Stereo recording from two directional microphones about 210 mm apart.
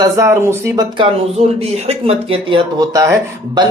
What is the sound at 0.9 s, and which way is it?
Speech, 25° right (ahead or behind).